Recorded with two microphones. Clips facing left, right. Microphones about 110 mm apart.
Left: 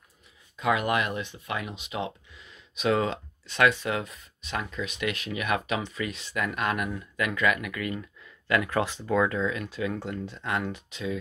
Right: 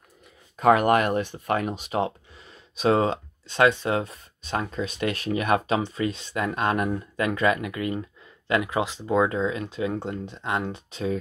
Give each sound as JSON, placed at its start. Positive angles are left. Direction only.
{"t": 0.6, "sound": "speech", "side_deg": -50}